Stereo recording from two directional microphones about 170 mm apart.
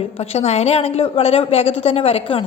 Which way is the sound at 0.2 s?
40° left (ahead or behind).